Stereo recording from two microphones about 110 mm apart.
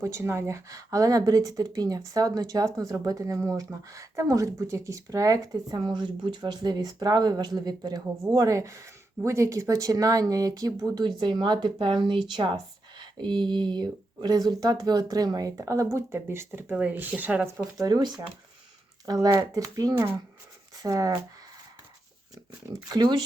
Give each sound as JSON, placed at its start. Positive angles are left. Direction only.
{"t": 0.0, "sound": "speech", "side_deg": -25}
{"t": 17.7, "sound": "speech", "side_deg": -35}
{"t": 22.9, "sound": "speech", "side_deg": -40}